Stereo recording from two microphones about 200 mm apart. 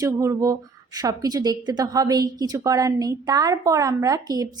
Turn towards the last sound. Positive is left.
turn(degrees=-20)  # may be behind; listen again after turning